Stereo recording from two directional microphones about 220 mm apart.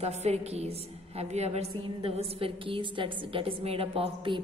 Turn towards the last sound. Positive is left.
turn(degrees=-25)  # may be behind; listen again after turning